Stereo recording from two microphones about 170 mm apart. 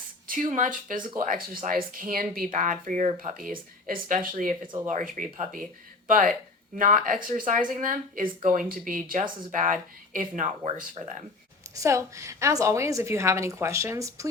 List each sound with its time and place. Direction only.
0.3 s speech: 50° right (ahead or behind)
11.7 s a woman's voice: 20° right (ahead or behind)